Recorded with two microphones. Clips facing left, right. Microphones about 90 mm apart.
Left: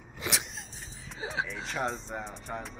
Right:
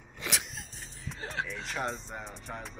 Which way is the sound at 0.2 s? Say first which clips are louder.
Left 2 dB; centre (ahead or behind).